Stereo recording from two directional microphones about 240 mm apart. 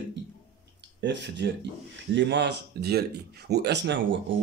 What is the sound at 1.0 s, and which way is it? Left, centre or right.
Speech, right.